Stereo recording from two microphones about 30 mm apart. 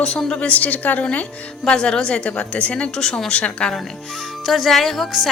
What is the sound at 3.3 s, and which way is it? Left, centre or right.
Speech, left.